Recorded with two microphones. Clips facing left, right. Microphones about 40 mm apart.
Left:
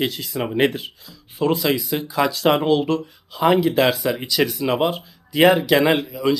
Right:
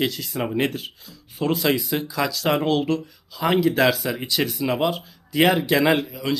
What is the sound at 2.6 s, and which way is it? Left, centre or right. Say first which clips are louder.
Speech: left 3 dB; centre.